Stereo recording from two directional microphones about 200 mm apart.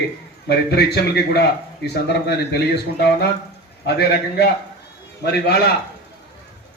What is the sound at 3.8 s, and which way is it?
A man's voice, 55° left (ahead or behind).